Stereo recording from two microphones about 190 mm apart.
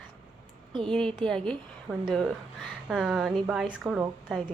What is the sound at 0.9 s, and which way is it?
A woman's voice, 5° left (ahead or behind).